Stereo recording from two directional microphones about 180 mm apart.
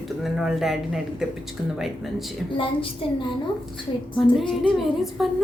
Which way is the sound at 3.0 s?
30° left (ahead or behind).